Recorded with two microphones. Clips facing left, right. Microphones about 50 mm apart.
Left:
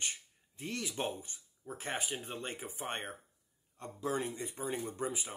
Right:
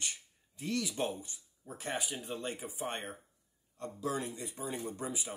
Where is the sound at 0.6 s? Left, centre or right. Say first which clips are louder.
Right 3 dB; left.